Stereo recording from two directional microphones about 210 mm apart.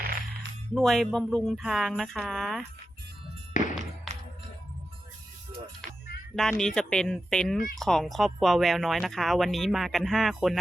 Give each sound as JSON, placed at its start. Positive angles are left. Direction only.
{"t": 0.7, "sound": "speech", "side_deg": 0}
{"t": 3.6, "sound": "thump", "side_deg": 35}
{"t": 6.3, "sound": "speech", "side_deg": 0}